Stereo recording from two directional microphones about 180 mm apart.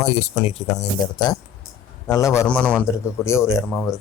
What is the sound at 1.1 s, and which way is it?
A man's voice, 25° left (ahead or behind).